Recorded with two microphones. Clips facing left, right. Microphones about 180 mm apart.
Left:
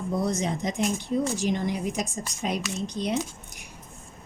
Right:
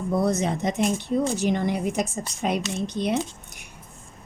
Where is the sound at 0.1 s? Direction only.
65° right (ahead or behind).